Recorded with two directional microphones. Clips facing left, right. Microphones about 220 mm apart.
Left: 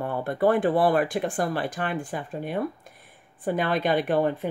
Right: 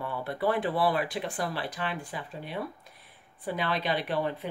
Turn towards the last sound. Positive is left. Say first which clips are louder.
# left 7 dB
turn(degrees=50)  # may be behind; listen again after turning